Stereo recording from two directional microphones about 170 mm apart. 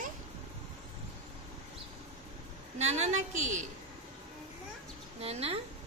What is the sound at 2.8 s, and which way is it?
Speech, 40° right (ahead or behind).